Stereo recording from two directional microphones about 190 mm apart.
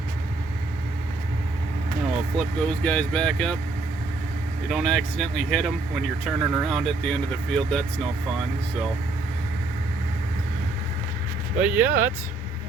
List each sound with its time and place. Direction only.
2.3 s speech: 5° left (ahead or behind)
4.7 s speech: centre (ahead or behind)
11.6 s speech: 10° right (ahead or behind)